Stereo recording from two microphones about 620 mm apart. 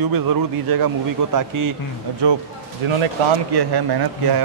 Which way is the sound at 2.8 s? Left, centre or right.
Right.